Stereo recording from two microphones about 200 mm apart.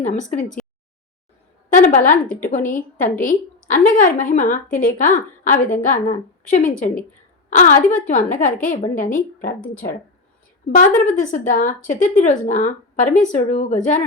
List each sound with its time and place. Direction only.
0.0 s a woman's voice: 35° left (ahead or behind)
1.7 s a woman's voice: 40° left (ahead or behind)
2.2 s a woman's voice: 5° left (ahead or behind)
2.5 s a woman's voice: 40° left (ahead or behind)
10.8 s a woman's voice: 40° left (ahead or behind)